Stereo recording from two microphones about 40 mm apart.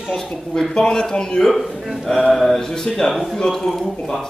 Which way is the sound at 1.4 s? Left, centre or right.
Centre.